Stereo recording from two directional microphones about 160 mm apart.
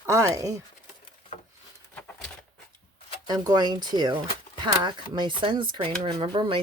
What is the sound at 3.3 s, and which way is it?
Speech, 25° right (ahead or behind).